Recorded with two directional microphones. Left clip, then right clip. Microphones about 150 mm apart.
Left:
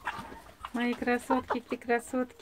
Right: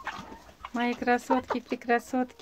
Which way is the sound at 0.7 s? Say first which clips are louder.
Right 4 dB; 20° right (ahead or behind).